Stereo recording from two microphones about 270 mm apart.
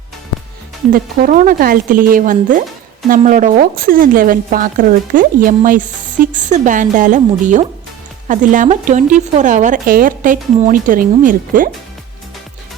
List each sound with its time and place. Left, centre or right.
0.9 s a woman's voice: right